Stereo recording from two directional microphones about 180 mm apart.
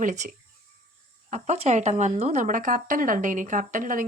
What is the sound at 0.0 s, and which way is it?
Speech, 45° right (ahead or behind).